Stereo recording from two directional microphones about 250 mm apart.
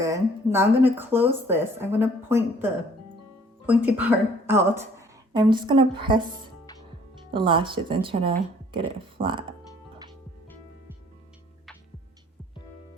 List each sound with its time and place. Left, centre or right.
0.0 s speech: centre
7.3 s speech: centre